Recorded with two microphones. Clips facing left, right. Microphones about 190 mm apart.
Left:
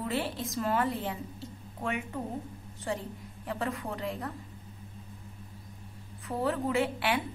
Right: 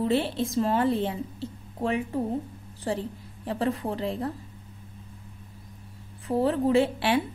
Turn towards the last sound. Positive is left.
turn(degrees=-30)  # may be behind; listen again after turning